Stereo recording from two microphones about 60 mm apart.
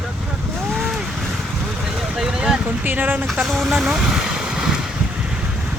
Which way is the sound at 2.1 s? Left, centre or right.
Centre.